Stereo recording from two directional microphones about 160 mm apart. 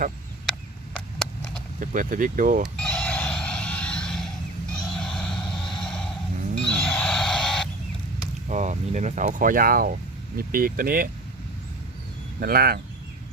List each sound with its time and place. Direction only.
1.8 s speech: 55° right (ahead or behind)
2.7 s a sound: 5° left (ahead or behind)
5.8 s snort: 5° left (ahead or behind)
6.6 s a sound: 5° left (ahead or behind)
8.4 s speech: 50° right (ahead or behind); by 11.1 s 65° right (ahead or behind)
12.4 s speech: 70° right (ahead or behind)